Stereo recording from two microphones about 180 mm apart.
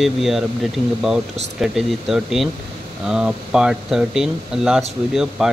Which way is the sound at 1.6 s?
Centre (ahead or behind).